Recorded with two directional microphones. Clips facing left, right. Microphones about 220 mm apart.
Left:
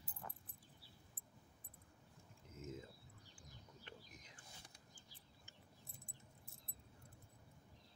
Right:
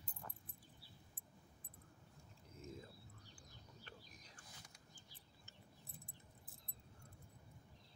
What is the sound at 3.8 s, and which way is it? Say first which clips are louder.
Bird: left 2 dB; 20° left (ahead or behind).